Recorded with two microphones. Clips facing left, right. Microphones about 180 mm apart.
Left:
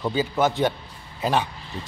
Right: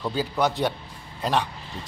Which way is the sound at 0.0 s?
Centre (ahead or behind).